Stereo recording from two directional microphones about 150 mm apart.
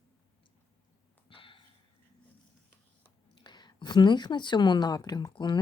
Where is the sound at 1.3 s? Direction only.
35° left (ahead or behind).